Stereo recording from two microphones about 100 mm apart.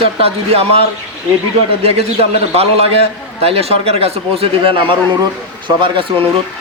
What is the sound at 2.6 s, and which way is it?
A man's voice, 90° right.